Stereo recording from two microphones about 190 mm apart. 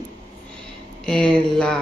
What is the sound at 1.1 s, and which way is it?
Speech, 5° left (ahead or behind).